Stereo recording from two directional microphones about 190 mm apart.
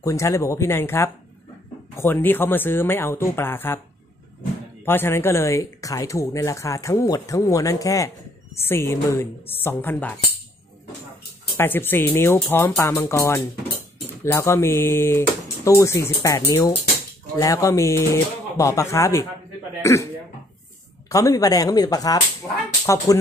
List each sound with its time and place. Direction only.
0.0 s speech: 15° left (ahead or behind)
4.8 s speech: 10° left (ahead or behind)
11.5 s speech: 10° left (ahead or behind)
21.1 s speech: 15° left (ahead or behind)